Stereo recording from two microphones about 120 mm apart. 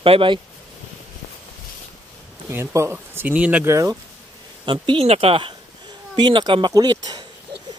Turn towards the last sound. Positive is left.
turn(degrees=-35)  # may be behind; listen again after turning